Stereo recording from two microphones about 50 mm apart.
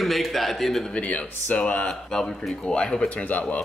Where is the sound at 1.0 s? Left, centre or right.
Left.